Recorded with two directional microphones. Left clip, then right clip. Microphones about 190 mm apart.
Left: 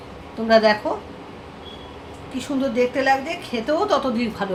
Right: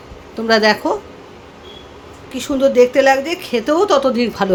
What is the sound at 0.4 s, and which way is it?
Speech, 50° right (ahead or behind).